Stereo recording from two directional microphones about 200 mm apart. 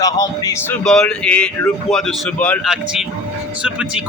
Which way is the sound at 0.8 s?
5° left (ahead or behind).